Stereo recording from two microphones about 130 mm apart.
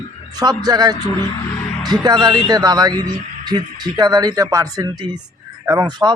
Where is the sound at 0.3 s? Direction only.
30° right (ahead or behind).